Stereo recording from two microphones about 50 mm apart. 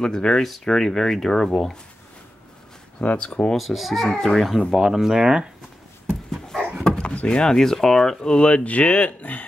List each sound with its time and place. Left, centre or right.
0.0 s speech: centre
3.0 s speech: left
3.5 s speech: centre
4.7 s speech: centre
6.3 s dog: centre
7.2 s speech: centre; by 9.5 s left